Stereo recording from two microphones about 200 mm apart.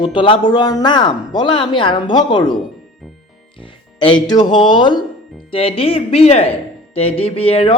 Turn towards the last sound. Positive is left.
turn(degrees=30)  # may be behind; listen again after turning